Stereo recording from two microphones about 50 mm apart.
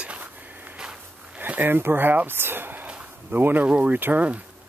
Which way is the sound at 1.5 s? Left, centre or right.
Right.